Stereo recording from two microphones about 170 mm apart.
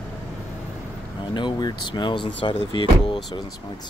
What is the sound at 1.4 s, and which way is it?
Speech, 25° left (ahead or behind).